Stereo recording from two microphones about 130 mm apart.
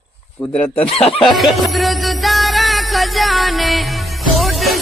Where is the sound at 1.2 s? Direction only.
Centre (ahead or behind).